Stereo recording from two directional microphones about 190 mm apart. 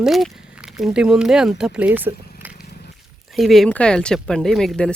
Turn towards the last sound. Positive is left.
turn(degrees=0)  # may be behind; listen again after turning